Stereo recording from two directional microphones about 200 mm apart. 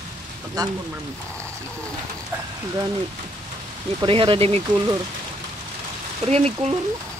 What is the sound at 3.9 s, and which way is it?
Speech, 25° right (ahead or behind).